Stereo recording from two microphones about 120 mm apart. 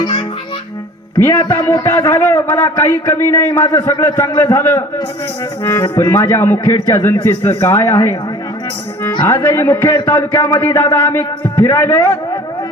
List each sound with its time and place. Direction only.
0.0 s music: 40° left (ahead or behind)
1.2 s a man's voice: 20° left (ahead or behind)
9.2 s a man's voice: 20° left (ahead or behind)